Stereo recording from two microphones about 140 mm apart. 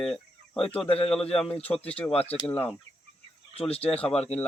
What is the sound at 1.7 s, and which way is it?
Speech, 10° left (ahead or behind).